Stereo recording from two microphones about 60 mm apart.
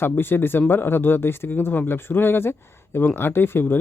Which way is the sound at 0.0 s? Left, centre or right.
Left.